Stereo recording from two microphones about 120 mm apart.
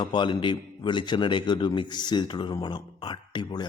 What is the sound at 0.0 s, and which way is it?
Speech, 40° left (ahead or behind).